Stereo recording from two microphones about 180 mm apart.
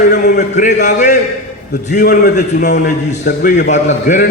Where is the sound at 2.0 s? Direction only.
65° left (ahead or behind).